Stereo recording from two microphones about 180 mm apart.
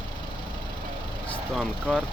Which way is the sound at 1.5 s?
Centre (ahead or behind).